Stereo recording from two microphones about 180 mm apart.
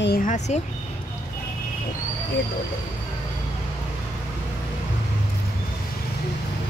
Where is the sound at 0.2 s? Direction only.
45° left (ahead or behind).